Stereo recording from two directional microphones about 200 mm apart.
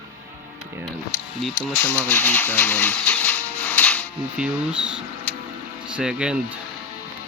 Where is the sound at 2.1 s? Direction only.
10° left (ahead or behind).